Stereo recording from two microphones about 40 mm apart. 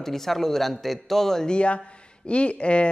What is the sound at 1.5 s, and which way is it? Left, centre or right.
Speech, left.